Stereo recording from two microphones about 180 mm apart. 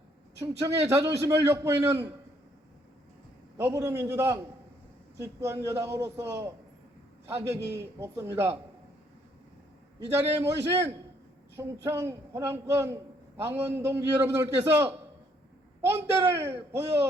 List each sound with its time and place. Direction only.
0.6 s a man's voice: 15° right (ahead or behind)
3.6 s a man's voice: 15° right (ahead or behind)
10.1 s a man's voice: 15° right (ahead or behind)